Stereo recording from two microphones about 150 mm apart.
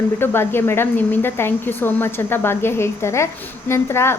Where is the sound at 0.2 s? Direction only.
15° left (ahead or behind).